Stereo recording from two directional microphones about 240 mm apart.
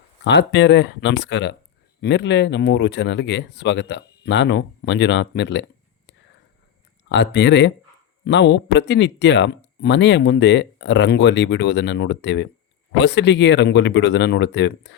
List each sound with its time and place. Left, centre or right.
0.3 s speech: left
7.1 s speech: left